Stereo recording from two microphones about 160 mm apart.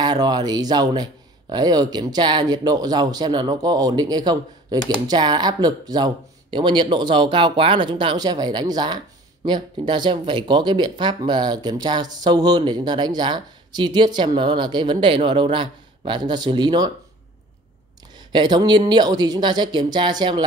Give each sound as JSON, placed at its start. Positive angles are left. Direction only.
{"t": 0.0, "sound": "speech", "side_deg": -25}
{"t": 18.1, "sound": "speech", "side_deg": -30}